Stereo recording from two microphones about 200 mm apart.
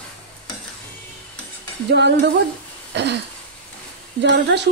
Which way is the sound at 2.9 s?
55° right (ahead or behind).